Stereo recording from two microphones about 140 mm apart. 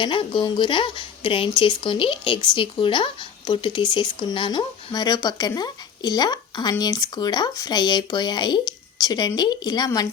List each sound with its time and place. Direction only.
0.0 s speech: 35° left (ahead or behind)